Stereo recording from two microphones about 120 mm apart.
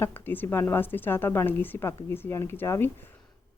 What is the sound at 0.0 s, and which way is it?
Speech, 15° left (ahead or behind).